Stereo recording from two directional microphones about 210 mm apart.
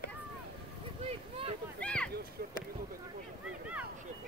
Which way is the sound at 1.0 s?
25° right (ahead or behind).